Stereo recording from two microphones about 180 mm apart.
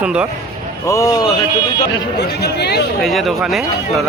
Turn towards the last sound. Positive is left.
turn(degrees=0)  # may be behind; listen again after turning